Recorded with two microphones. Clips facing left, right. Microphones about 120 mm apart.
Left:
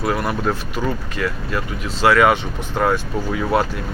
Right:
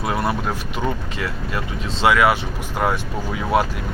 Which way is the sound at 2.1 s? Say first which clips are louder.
Left 2 dB; 5° right (ahead or behind).